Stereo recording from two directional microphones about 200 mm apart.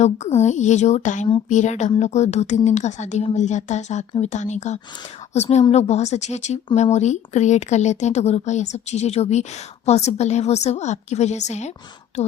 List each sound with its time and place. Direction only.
0.0 s a woman's voice: 35° left (ahead or behind)